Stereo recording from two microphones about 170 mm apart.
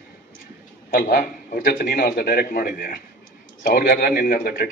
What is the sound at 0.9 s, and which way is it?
A man's voice, 60° left (ahead or behind).